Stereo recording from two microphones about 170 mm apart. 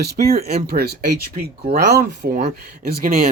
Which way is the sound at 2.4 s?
45° right (ahead or behind).